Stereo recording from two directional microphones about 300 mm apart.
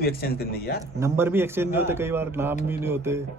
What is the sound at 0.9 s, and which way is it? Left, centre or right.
A man's voice, centre.